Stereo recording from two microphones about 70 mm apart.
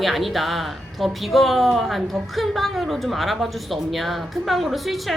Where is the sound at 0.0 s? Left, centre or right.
Centre.